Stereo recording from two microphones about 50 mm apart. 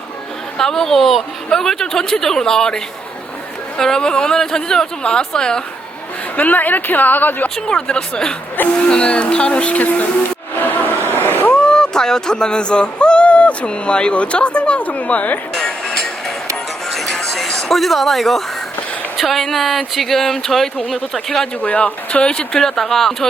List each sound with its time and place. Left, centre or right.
0.6 s speech: centre
6.3 s a woman's voice: left
7.5 s speech: centre; by 10.1 s left
10.5 s a sound: left
11.1 s vehicle: left
11.4 s speech: centre
15.5 s music: centre
17.5 s a woman's voice: centre
21.6 s speech: left; by 23.3 s centre